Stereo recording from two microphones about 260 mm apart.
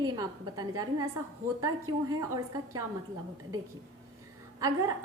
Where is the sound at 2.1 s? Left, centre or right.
Centre.